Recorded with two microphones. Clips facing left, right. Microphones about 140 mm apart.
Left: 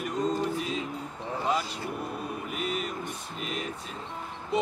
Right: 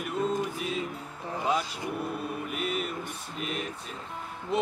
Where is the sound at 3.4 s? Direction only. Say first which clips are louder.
Right 1 dB; 5° right (ahead or behind).